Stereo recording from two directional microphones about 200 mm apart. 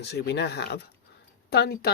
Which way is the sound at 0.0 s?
60° left (ahead or behind).